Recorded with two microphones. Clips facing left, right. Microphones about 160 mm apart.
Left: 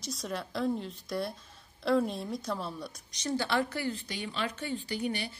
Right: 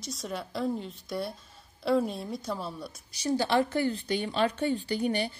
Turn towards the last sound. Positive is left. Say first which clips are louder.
# right 5 dB
turn(degrees=-35)  # may be behind; listen again after turning